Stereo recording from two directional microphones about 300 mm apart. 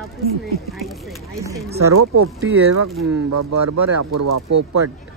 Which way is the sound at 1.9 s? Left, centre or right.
Right.